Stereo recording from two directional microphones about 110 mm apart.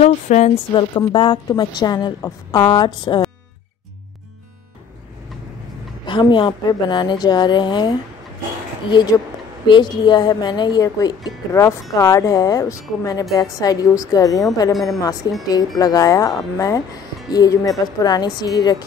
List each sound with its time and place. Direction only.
0.0 s speech: 90° left
0.7 s a woman's voice: 50° left (ahead or behind)
6.0 s a woman's voice: 45° left (ahead or behind)